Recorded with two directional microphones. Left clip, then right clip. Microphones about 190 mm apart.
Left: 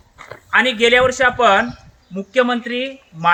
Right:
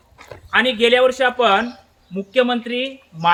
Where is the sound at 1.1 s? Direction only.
35° right (ahead or behind).